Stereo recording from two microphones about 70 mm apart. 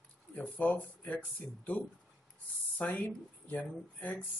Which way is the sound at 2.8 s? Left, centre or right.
Left.